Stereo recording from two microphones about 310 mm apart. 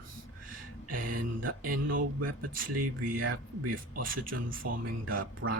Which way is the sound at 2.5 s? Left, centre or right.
Right.